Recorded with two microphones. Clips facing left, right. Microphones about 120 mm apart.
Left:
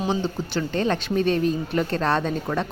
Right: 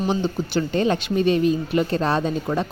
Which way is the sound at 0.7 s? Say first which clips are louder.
Right 2 dB; 15° right (ahead or behind).